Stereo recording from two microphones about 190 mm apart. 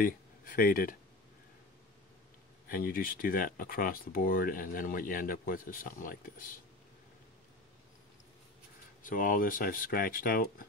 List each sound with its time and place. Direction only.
0.0 s speech: 50° left (ahead or behind)
2.7 s speech: 50° left (ahead or behind)
9.0 s speech: 45° left (ahead or behind)